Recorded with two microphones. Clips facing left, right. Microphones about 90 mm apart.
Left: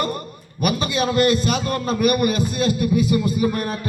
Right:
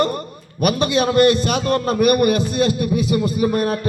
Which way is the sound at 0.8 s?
55° right (ahead or behind).